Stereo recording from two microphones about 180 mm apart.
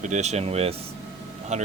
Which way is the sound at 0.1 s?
40° right (ahead or behind).